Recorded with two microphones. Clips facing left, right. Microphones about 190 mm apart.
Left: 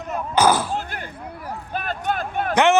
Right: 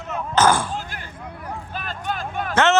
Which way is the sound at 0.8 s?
50° left (ahead or behind).